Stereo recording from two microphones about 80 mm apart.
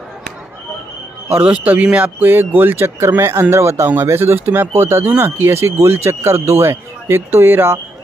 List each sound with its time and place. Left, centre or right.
1.4 s speech: centre